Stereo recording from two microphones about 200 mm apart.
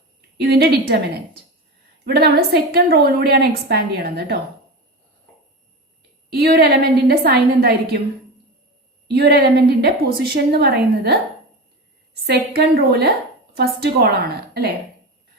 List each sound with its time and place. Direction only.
0.4 s a woman's voice: 50° right (ahead or behind)
6.3 s a woman's voice: 50° right (ahead or behind)
9.1 s a woman's voice: 50° right (ahead or behind)
12.2 s a woman's voice: 50° right (ahead or behind)